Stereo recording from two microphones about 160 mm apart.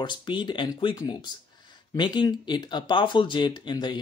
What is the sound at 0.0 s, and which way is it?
Speech, 30° left (ahead or behind).